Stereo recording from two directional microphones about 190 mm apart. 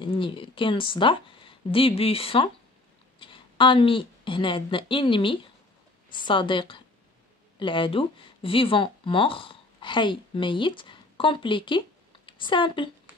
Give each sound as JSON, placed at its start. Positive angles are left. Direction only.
{"t": 0.0, "sound": "a woman's voice", "side_deg": 25}